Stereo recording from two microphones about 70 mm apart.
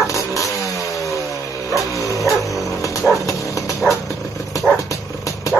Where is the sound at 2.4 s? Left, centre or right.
Centre.